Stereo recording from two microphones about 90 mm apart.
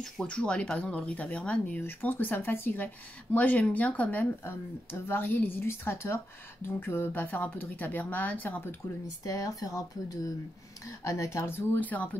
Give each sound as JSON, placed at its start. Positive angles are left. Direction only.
{"t": 0.0, "sound": "a woman's voice", "side_deg": 10}
{"t": 9.2, "sound": "a woman's voice", "side_deg": 40}